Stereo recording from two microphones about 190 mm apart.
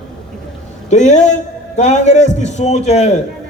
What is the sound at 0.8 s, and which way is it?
A man's voice, 40° left (ahead or behind).